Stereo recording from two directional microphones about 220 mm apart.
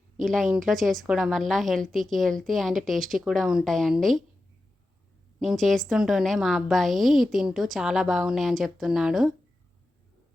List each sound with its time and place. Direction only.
0.5 s a woman's voice: centre (ahead or behind)
5.4 s a woman's voice: centre (ahead or behind)